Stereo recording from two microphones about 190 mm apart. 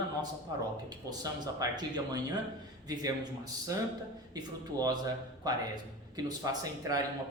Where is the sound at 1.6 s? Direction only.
20° right (ahead or behind).